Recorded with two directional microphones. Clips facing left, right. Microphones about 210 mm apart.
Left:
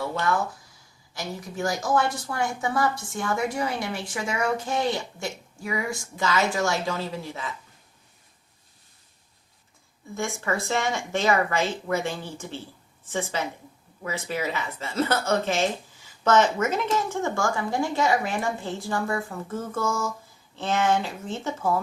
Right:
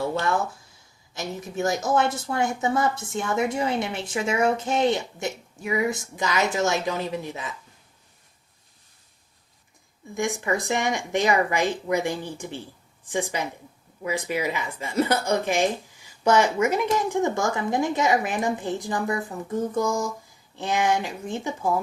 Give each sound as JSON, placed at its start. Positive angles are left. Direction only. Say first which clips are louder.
{"t": 1.1, "sound": "speech", "louder": "right 3 dB", "side_deg": -20}
{"t": 10.2, "sound": "a woman's voice", "louder": "right 3 dB", "side_deg": -15}